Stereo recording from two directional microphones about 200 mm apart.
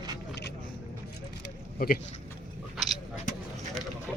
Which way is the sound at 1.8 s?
45° left (ahead or behind).